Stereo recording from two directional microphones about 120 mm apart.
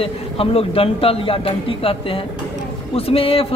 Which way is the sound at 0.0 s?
55° left (ahead or behind).